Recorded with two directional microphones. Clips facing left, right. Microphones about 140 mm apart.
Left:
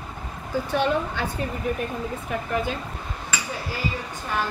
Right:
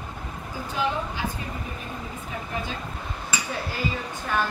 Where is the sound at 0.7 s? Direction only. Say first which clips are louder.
Left 3 dB; 70° left (ahead or behind).